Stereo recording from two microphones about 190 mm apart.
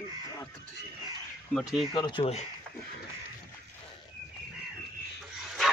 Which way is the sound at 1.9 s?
25° left (ahead or behind).